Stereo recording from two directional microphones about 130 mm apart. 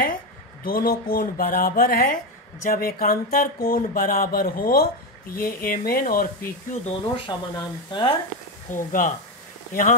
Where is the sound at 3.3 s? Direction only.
90° left.